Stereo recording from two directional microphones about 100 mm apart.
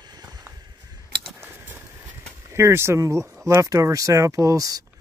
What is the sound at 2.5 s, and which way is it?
Speech, 25° right (ahead or behind).